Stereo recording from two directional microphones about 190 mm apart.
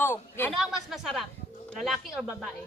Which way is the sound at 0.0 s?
10° left (ahead or behind).